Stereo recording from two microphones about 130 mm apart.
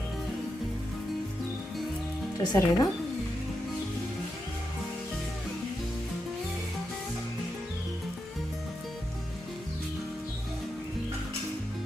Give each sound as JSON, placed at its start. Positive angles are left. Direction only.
{"t": 2.4, "sound": "speech", "side_deg": 30}